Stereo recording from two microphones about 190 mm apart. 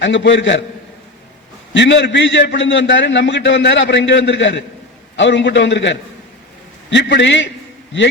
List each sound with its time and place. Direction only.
0.0 s a man's voice: 75° left (ahead or behind)
1.7 s a man's voice: 70° left (ahead or behind)